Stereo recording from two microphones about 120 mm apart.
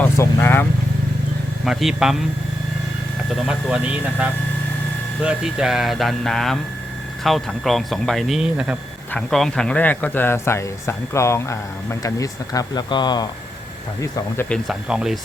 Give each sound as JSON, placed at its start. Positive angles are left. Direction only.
{"t": 0.0, "sound": "speech", "side_deg": 20}
{"t": 1.6, "sound": "speech", "side_deg": 0}
{"t": 3.2, "sound": "speech", "side_deg": -5}
{"t": 5.2, "sound": "speech", "side_deg": -5}
{"t": 9.1, "sound": "speech", "side_deg": 5}
{"t": 14.7, "sound": "speech", "side_deg": -5}